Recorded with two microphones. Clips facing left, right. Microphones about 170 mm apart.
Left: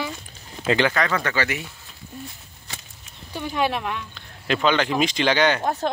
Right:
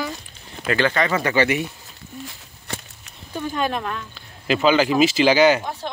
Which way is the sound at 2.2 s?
80° right.